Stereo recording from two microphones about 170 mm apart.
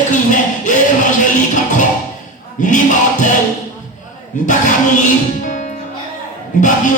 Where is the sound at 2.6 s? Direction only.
45° left (ahead or behind).